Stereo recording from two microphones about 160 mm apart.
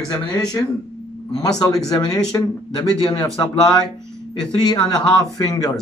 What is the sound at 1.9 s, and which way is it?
Speech, 25° left (ahead or behind).